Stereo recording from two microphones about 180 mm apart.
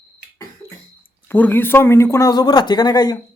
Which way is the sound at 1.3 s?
10° left (ahead or behind).